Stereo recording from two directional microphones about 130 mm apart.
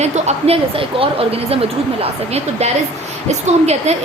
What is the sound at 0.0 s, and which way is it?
A woman's voice, 60° right (ahead or behind).